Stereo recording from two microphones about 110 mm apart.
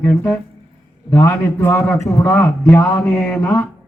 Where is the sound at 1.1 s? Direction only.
20° left (ahead or behind).